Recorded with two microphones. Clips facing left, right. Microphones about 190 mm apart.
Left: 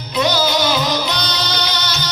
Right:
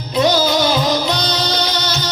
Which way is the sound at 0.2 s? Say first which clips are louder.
Right 3 dB; 45° right (ahead or behind).